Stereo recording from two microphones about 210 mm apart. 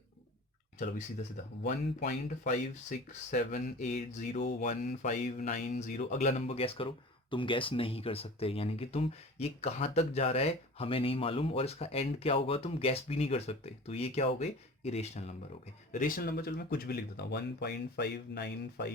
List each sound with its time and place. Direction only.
1.6 s speech: 40° left (ahead or behind)